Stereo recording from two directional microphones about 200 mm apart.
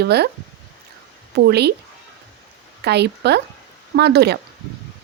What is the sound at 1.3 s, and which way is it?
Speech, 55° right (ahead or behind).